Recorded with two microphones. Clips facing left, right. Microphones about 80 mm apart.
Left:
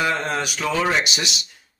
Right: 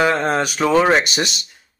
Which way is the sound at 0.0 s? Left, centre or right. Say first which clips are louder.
Right 6 dB; right.